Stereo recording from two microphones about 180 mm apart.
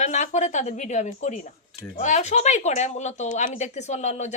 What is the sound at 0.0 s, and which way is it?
Speech, 40° left (ahead or behind).